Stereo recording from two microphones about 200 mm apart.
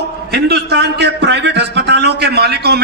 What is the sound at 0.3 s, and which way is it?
A man's voice, 55° right (ahead or behind).